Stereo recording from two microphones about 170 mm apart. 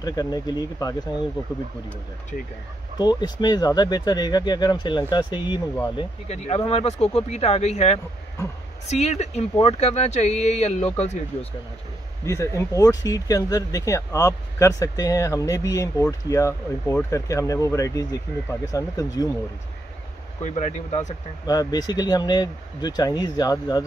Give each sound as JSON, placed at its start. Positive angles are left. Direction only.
{"t": 0.0, "sound": "speech", "side_deg": 20}
{"t": 3.0, "sound": "speech", "side_deg": 25}
{"t": 6.2, "sound": "speech", "side_deg": 40}
{"t": 12.3, "sound": "speech", "side_deg": 15}
{"t": 20.4, "sound": "speech", "side_deg": 40}
{"t": 21.5, "sound": "speech", "side_deg": 20}